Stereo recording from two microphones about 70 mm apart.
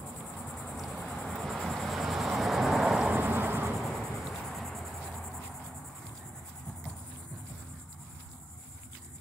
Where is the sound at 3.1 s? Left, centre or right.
Right.